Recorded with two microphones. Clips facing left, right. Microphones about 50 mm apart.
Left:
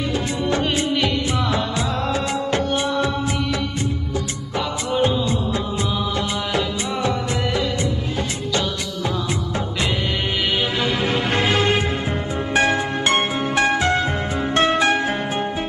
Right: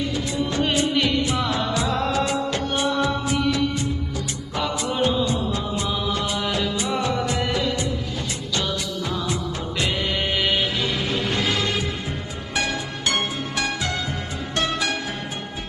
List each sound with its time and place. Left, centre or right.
0.6 s music: centre
1.5 s music: left
1.9 s music of bollywood: centre
2.7 s music: left
5.8 s music: left
10.8 s music: left